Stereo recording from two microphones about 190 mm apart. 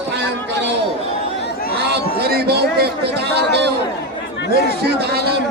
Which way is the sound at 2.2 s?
55° right (ahead or behind).